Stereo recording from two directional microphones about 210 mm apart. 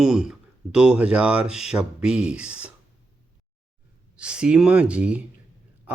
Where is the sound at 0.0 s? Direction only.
5° right (ahead or behind).